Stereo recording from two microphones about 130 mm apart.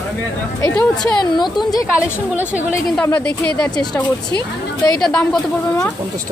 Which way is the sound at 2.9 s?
10° left (ahead or behind).